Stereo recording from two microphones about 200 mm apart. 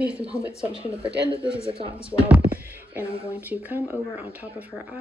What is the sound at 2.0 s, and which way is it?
Speech, 5° right (ahead or behind).